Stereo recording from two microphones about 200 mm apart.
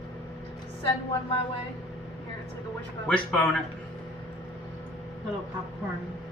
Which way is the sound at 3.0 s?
5° left (ahead or behind).